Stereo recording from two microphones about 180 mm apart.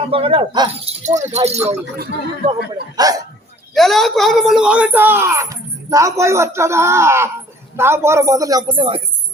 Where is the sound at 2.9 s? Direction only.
20° right (ahead or behind).